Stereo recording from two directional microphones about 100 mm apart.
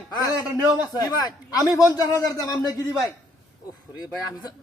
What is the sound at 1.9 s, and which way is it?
Speech, 40° left (ahead or behind).